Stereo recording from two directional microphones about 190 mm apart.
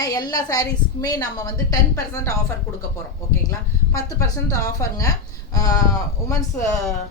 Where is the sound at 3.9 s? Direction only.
15° left (ahead or behind).